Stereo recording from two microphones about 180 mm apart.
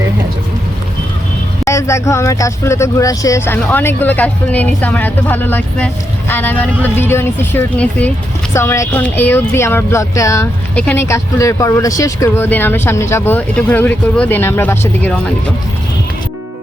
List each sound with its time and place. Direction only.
1.6 s speech: 15° left (ahead or behind)